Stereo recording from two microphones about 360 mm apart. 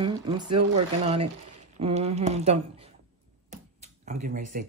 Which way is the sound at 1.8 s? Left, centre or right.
Centre.